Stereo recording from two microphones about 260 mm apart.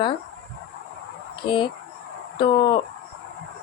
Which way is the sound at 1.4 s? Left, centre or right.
Centre.